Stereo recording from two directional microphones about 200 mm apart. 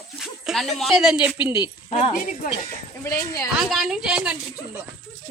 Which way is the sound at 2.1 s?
45° left (ahead or behind).